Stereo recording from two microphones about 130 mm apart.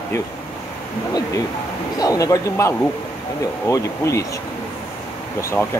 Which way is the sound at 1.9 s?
25° left (ahead or behind).